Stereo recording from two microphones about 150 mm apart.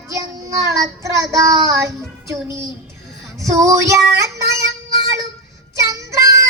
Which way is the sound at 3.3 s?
20° right (ahead or behind).